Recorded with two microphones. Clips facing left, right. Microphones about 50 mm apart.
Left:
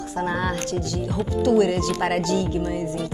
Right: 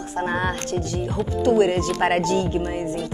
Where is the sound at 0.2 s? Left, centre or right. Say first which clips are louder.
Right 1 dB; right.